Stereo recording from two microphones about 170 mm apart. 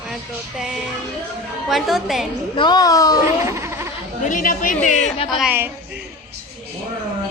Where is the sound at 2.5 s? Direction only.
25° left (ahead or behind).